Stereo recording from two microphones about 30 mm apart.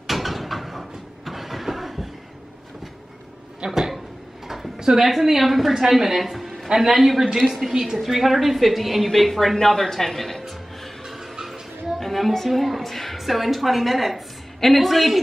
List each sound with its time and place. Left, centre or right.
0.0 s vehicle: centre
3.6 s speech: right
4.7 s a sound: right
5.0 s a woman's voice: centre
7.7 s a woman's voice: centre
8.0 s a woman's voice: centre
9.6 s speech: centre
12.0 s a woman's voice: centre